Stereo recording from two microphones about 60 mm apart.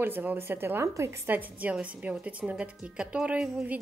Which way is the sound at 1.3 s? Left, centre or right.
Right.